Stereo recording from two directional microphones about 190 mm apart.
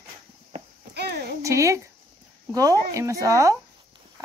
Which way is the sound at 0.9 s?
60° right (ahead or behind).